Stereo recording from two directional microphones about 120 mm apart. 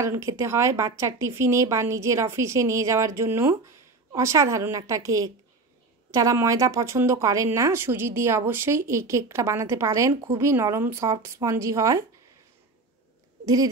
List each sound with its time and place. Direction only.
0.0 s speech: 25° right (ahead or behind)